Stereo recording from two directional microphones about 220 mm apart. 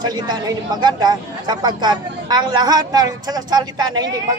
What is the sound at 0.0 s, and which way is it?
A man's voice, 20° right (ahead or behind).